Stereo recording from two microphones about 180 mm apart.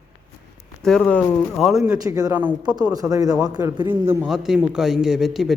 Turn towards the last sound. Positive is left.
turn(degrees=0)  # may be behind; listen again after turning